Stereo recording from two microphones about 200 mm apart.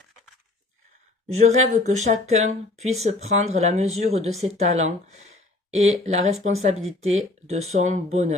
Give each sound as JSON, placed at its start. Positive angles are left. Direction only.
{"t": 1.4, "sound": "speech", "side_deg": -35}